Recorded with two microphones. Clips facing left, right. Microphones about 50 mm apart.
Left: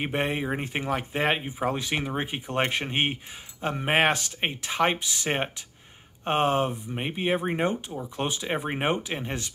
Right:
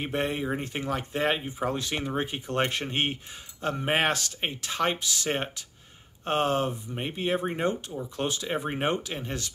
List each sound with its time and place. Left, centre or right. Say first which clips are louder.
0.0 s speech: left 1 dB; left